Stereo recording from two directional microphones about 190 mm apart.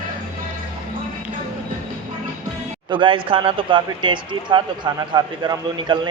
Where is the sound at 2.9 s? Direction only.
25° right (ahead or behind).